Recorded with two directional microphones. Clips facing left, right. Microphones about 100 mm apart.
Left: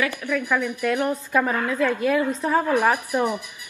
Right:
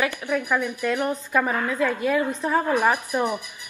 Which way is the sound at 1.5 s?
15° right (ahead or behind).